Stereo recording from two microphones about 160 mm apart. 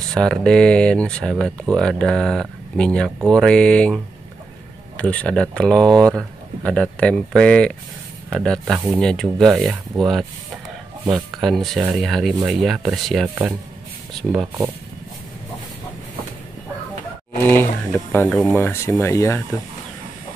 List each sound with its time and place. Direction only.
0.1 s speech: 5° left (ahead or behind)
11.4 s speech: centre (ahead or behind)
13.3 s speech: 10° right (ahead or behind)
17.5 s speech: 15° left (ahead or behind)